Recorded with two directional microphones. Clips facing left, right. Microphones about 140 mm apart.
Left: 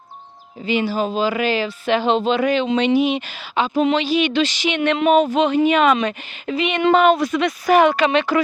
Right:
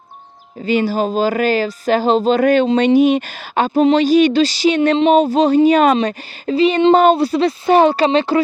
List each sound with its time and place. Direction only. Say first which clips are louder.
0.6 s speech: right 4 dB; 40° right (ahead or behind)